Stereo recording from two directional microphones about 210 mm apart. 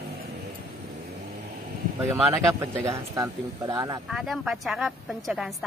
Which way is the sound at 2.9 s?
20° right (ahead or behind).